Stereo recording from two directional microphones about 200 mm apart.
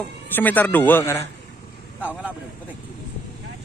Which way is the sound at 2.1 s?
5° right (ahead or behind).